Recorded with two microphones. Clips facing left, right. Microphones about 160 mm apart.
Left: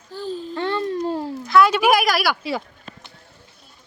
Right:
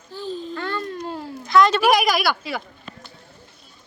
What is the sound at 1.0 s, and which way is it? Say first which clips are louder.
Babbling: left 6 dB; 40° left (ahead or behind).